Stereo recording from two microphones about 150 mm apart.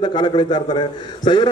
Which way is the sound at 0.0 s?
30° left (ahead or behind).